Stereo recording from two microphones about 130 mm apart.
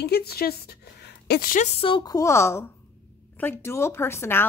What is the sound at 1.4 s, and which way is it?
Speech, 85° left.